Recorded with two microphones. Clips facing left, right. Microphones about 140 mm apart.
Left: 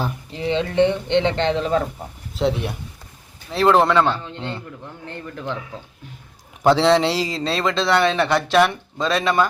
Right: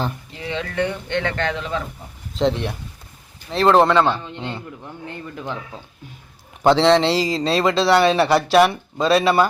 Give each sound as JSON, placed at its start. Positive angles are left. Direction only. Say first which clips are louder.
{"t": 0.3, "sound": "speech", "louder": "left 7 dB", "side_deg": 30}
{"t": 2.4, "sound": "a man's voice", "louder": "right 1 dB", "side_deg": 5}
{"t": 4.0, "sound": "a man's voice", "louder": "right 1 dB", "side_deg": -15}
{"t": 6.6, "sound": "a man's voice", "louder": "right 1 dB", "side_deg": 5}